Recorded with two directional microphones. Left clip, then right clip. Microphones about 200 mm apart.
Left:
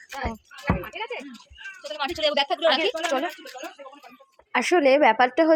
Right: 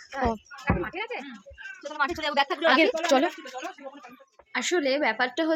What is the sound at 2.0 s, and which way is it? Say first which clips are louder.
Speech: left 2 dB; 30° right (ahead or behind).